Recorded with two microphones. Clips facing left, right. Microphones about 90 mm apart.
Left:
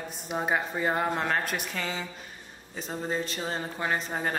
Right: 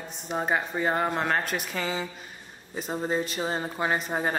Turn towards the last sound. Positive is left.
turn(degrees=-10)  # may be behind; listen again after turning